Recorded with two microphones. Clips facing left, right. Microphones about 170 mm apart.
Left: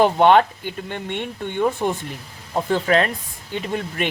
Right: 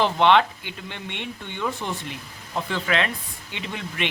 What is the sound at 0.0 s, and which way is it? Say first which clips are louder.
Speech: left 4 dB; 45° left (ahead or behind).